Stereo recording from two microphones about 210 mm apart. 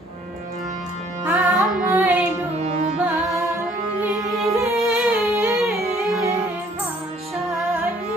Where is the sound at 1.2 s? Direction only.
10° right (ahead or behind).